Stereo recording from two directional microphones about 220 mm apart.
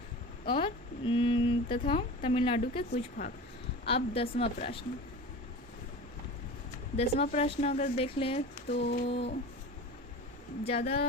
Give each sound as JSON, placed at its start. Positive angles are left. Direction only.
{"t": 0.4, "sound": "a sound", "side_deg": 25}
{"t": 1.9, "sound": "a woman's voice", "side_deg": 25}
{"t": 6.9, "sound": "a woman's voice", "side_deg": 30}
{"t": 8.7, "sound": "humming", "side_deg": 50}
{"t": 10.6, "sound": "a woman's voice", "side_deg": 25}